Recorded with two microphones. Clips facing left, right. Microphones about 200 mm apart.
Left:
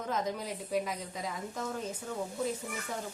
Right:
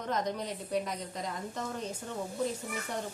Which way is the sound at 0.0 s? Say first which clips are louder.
Right 1 dB; 5° left (ahead or behind).